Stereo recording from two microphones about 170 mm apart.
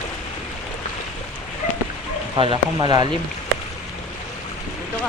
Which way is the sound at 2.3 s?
30° right (ahead or behind).